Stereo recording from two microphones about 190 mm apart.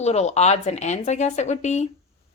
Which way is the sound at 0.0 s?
35° left (ahead or behind).